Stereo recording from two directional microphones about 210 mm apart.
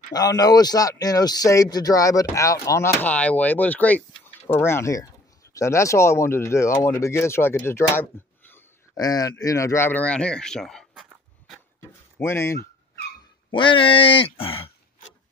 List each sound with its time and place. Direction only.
0.1 s a man's voice: 15° left (ahead or behind); by 11.6 s centre (ahead or behind)
12.2 s a man's voice: 10° left (ahead or behind)
13.5 s speech: 25° left (ahead or behind)